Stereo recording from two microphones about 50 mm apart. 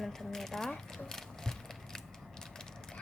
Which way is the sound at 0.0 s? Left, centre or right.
Centre.